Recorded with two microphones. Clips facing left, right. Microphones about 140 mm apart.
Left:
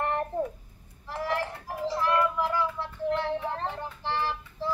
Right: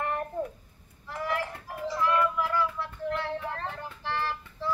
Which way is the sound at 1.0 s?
30° left (ahead or behind).